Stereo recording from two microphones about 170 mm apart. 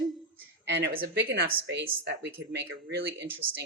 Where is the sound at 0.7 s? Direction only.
75° right (ahead or behind).